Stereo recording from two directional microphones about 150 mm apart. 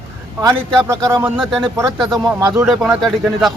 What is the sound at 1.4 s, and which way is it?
A man's voice, 5° left (ahead or behind).